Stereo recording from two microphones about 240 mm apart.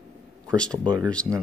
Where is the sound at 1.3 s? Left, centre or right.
Centre.